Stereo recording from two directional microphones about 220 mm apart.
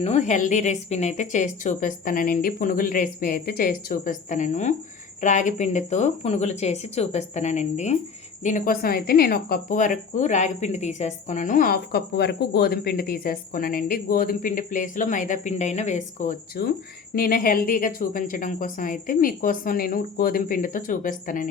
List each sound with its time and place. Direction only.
0.0 s a woman's voice: 30° left (ahead or behind)